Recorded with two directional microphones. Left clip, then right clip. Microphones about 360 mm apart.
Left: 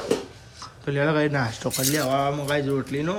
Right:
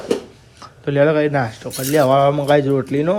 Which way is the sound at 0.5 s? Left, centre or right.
Centre.